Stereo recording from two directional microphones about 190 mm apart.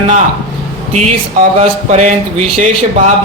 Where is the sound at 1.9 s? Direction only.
40° right (ahead or behind).